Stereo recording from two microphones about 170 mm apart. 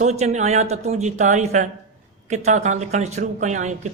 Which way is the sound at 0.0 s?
40° right (ahead or behind).